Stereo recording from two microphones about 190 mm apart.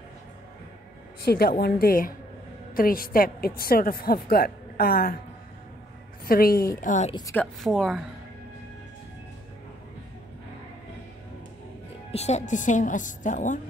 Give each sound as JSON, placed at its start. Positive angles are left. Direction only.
{"t": 1.2, "sound": "a woman's voice", "side_deg": 55}
{"t": 6.2, "sound": "a woman's voice", "side_deg": 50}
{"t": 7.1, "sound": "a woman's voice", "side_deg": 20}
{"t": 7.3, "sound": "speech", "side_deg": 0}
{"t": 12.1, "sound": "a woman's voice", "side_deg": 35}